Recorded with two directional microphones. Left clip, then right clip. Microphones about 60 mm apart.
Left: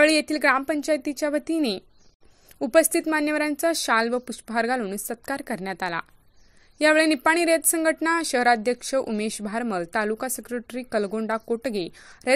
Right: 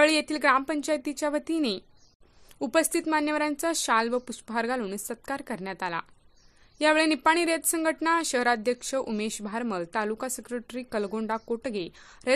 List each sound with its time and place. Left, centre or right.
0.0 s a woman's voice: left
3.9 s speech: left
4.8 s a woman's voice: left
5.1 s speech: left
6.8 s speech: left
9.2 s a woman's voice: left
10.1 s a woman's voice: left